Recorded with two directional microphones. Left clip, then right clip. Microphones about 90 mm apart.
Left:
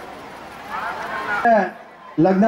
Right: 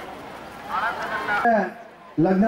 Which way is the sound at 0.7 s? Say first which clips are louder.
Right 1 dB; 5° left (ahead or behind).